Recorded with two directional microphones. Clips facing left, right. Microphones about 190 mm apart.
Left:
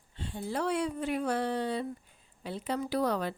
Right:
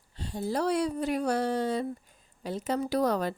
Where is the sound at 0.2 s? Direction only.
40° right (ahead or behind).